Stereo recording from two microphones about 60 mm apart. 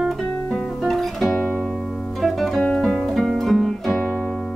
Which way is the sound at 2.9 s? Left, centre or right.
Centre.